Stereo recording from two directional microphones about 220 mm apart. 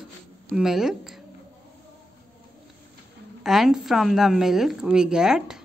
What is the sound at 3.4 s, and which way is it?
Speech, centre (ahead or behind).